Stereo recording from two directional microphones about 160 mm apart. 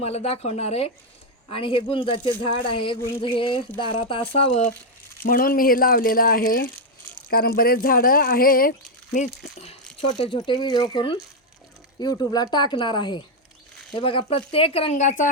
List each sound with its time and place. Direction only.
0.0 s speech: 40° left (ahead or behind)
5.2 s speech: 65° left (ahead or behind)
10.2 s speech: 30° left (ahead or behind); by 15.3 s 50° left (ahead or behind)